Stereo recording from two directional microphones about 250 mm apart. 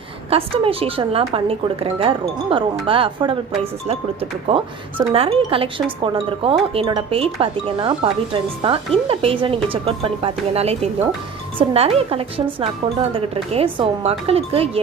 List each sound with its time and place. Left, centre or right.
0.3 s speech: right